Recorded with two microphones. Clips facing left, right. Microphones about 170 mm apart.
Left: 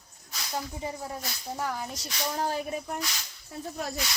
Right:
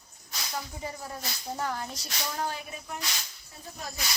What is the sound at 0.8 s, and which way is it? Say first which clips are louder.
Speech: left 3 dB; 20° left (ahead or behind).